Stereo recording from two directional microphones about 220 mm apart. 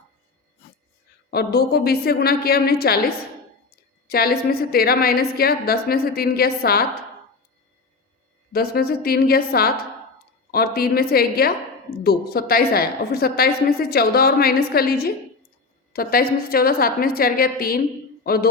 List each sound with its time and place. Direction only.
1.3 s a woman's voice: 45° left (ahead or behind)
4.1 s a woman's voice: 45° left (ahead or behind)
8.5 s a woman's voice: 45° left (ahead or behind)
18.2 s a sound: 45° left (ahead or behind)